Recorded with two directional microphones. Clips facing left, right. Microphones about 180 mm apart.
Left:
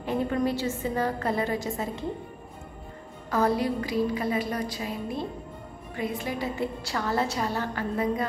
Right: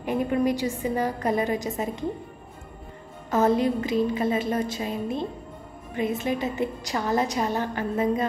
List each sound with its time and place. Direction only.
0.0 s a woman's voice: 15° right (ahead or behind)
3.3 s a woman's voice: 20° right (ahead or behind)